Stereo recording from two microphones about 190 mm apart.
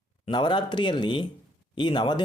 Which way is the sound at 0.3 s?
25° left (ahead or behind).